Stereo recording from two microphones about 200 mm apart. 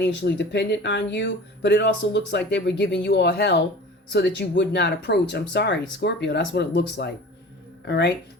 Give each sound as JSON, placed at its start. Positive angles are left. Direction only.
{"t": 0.0, "sound": "speech", "side_deg": 60}